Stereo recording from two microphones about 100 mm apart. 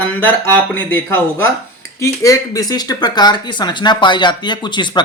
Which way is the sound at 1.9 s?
30° left (ahead or behind).